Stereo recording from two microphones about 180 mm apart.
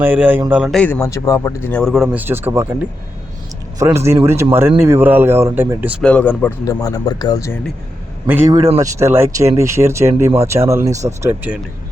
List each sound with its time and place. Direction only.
0.0 s speech: 10° right (ahead or behind)
0.8 s speech: 10° left (ahead or behind); by 2.7 s 15° right (ahead or behind)
3.8 s speech: 15° right (ahead or behind)
6.0 s speech: 5° left (ahead or behind)
8.3 s speech: 20° right (ahead or behind)